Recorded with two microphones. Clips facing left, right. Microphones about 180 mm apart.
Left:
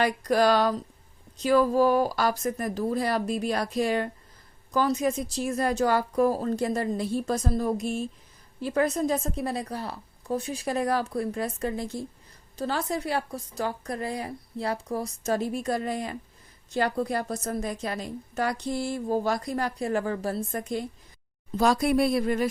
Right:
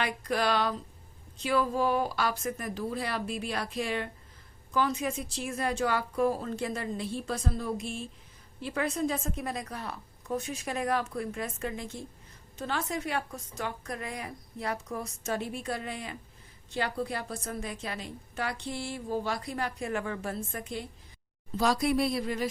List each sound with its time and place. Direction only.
0.0 s a woman's voice: 40° left (ahead or behind)